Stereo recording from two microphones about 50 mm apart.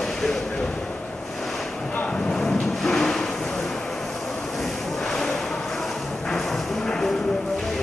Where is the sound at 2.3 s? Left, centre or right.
Centre.